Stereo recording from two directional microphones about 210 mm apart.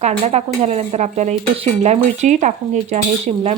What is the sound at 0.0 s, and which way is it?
Speech, 30° right (ahead or behind).